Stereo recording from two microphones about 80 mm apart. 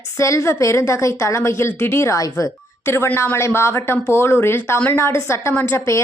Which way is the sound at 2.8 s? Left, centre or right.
Left.